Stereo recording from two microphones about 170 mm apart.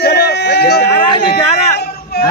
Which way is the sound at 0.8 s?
30° left (ahead or behind).